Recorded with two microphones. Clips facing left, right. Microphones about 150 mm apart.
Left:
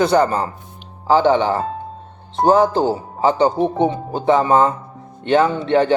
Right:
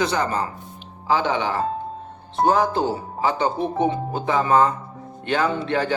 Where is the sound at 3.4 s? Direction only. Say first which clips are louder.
Left 6 dB; 35° left (ahead or behind).